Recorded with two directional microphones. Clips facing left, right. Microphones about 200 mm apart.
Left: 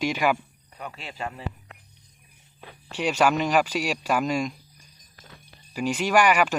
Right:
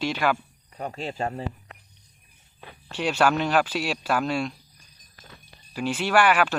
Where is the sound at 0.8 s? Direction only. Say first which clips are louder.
Right 5 dB; 40° right (ahead or behind).